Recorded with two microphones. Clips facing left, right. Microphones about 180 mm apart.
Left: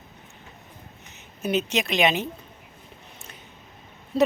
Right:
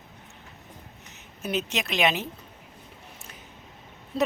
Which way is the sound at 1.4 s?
Centre (ahead or behind).